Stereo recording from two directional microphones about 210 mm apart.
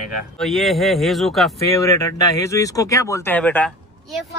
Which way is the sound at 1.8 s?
15° left (ahead or behind).